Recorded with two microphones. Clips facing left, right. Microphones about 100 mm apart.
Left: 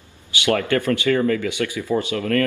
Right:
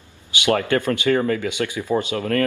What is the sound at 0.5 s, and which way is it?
Speech, 25° right (ahead or behind).